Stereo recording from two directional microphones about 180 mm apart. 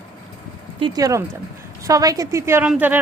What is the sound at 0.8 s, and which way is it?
A woman's voice, 20° right (ahead or behind).